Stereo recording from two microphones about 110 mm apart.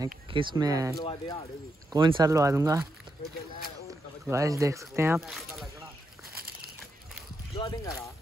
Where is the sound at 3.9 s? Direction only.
30° right (ahead or behind).